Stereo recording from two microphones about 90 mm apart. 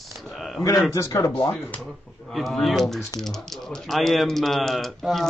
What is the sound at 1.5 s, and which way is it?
Speech, 5° left (ahead or behind).